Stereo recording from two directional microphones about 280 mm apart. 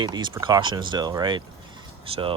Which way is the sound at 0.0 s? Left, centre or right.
Centre.